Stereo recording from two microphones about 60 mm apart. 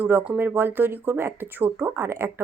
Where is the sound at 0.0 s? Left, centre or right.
Right.